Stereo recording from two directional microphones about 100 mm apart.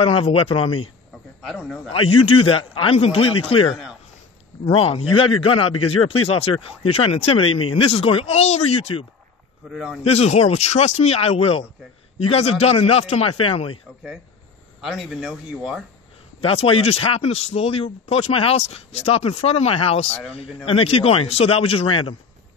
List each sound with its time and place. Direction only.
0.0 s speech: 65° left (ahead or behind)
1.4 s speech: centre (ahead or behind)
1.9 s a man's voice: 65° left (ahead or behind); by 9.0 s 80° left
9.7 s speech: centre (ahead or behind)
10.0 s speech: 90° left; by 11.6 s 75° left (ahead or behind)
12.3 s speech: 90° left; by 13.7 s 65° left (ahead or behind)
14.8 s speech: 5° right (ahead or behind)
16.3 s speech: 70° left (ahead or behind)
20.1 s speech: 15° left (ahead or behind)
20.6 s speech: 75° left (ahead or behind)